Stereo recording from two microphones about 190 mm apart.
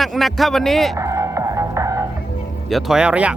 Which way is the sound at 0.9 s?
15° right (ahead or behind).